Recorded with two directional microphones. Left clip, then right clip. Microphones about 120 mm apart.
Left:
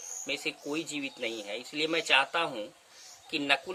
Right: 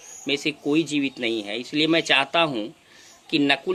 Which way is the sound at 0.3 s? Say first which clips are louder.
Right 10 dB; 30° left (ahead or behind).